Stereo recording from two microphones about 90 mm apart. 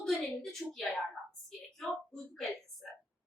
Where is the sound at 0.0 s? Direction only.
Centre (ahead or behind).